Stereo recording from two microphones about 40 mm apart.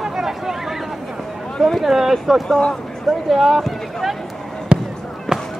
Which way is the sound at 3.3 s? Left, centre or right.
Centre.